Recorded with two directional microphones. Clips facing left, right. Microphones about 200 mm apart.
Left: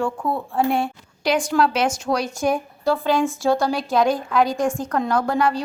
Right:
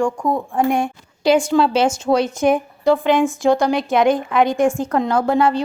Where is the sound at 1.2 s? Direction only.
25° right (ahead or behind).